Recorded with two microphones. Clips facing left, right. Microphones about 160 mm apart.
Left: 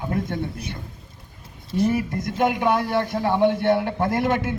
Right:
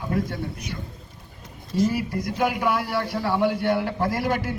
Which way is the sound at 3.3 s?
25° left (ahead or behind).